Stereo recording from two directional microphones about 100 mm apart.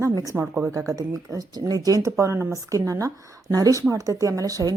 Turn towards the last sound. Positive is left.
turn(degrees=-35)  # may be behind; listen again after turning